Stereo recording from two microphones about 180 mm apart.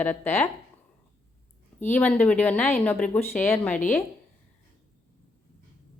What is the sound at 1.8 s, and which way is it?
A woman's voice, 10° left (ahead or behind).